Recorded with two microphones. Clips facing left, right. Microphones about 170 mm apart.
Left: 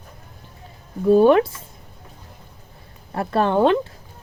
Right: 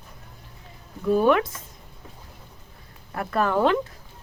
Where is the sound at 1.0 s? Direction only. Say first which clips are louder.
Left 6 dB; 30° left (ahead or behind).